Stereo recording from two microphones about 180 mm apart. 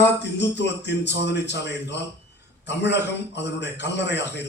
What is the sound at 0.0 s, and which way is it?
A man's voice, 75° left (ahead or behind).